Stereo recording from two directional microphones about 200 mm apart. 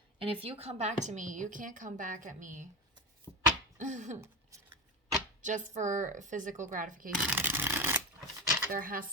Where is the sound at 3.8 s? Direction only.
35° right (ahead or behind).